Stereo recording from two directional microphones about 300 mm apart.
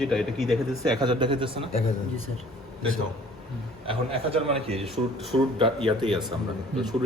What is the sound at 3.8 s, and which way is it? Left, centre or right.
A man's voice, centre.